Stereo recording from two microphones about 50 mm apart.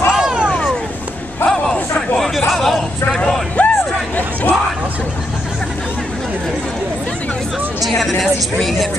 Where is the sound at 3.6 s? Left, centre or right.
Left.